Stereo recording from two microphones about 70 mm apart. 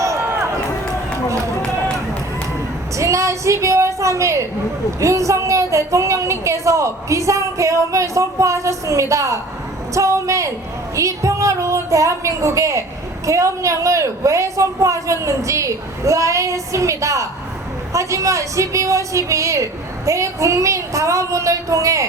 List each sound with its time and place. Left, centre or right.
0.0 s run: right
2.9 s a sound: right
4.9 s a woman's voice: right